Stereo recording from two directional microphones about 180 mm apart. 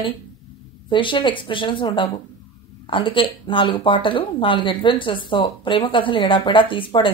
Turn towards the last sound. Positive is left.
turn(degrees=30)  # may be behind; listen again after turning